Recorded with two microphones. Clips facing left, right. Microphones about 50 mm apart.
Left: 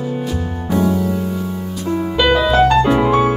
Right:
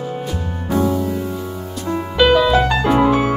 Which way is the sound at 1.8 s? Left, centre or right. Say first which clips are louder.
Left 3 dB; centre.